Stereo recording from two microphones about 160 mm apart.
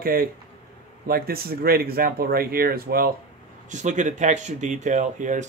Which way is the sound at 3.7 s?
50° right (ahead or behind).